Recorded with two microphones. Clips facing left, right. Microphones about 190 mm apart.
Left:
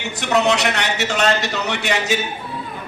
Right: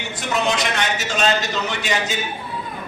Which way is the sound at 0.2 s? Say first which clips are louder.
Left 4 dB; 70° left (ahead or behind).